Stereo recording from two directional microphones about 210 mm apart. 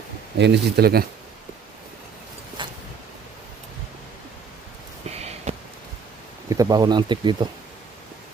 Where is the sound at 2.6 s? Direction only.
20° right (ahead or behind).